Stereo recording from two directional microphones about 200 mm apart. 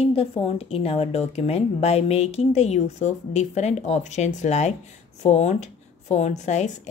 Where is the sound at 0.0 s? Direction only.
30° left (ahead or behind).